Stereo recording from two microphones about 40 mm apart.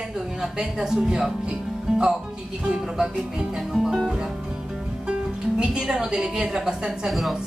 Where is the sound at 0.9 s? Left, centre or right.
Centre.